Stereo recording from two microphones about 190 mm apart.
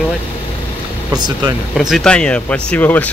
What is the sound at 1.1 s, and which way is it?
Speech, 20° right (ahead or behind).